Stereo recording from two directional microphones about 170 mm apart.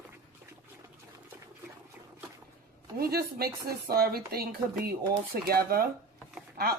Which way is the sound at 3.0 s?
65° right (ahead or behind).